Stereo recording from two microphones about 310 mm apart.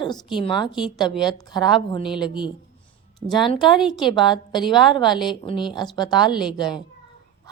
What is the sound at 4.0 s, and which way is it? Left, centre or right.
Speech, centre.